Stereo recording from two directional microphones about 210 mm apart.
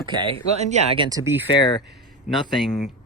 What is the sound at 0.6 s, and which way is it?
Speech, 30° right (ahead or behind).